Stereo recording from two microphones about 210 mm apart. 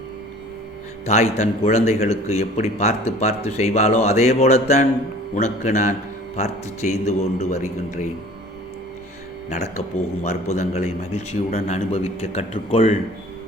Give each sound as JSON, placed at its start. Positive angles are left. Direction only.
{"t": 1.0, "sound": "a man's voice", "side_deg": 30}
{"t": 9.5, "sound": "a man's voice", "side_deg": 35}